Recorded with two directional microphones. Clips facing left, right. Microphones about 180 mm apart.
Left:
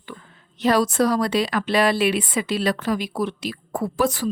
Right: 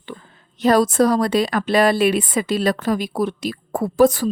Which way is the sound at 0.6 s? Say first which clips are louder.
Right 4 dB; 45° right (ahead or behind).